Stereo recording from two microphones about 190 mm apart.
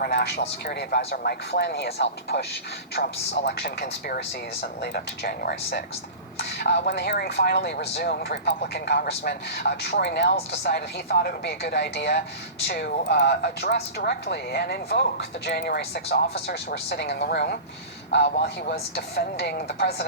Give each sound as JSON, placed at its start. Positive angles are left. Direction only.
{"t": 0.0, "sound": "speech", "side_deg": 60}